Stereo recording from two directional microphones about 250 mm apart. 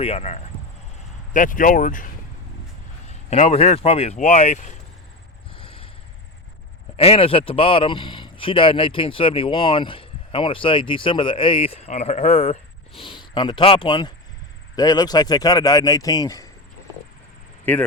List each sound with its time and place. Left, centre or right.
0.0 s a man's voice: left
3.1 s a man's voice: left
5.5 s vehicle: left
6.9 s a man's voice: left
17.7 s speech: centre